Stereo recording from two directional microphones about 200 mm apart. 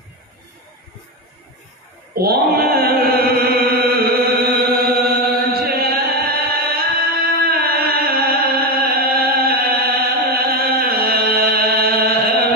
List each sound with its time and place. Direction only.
2.1 s chant: 50° right (ahead or behind)
5.1 s music: 50° right (ahead or behind)